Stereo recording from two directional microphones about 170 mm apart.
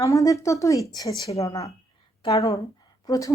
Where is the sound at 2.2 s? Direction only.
25° left (ahead or behind).